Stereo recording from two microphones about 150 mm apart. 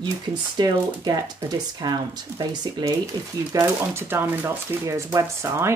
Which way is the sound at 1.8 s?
25° right (ahead or behind).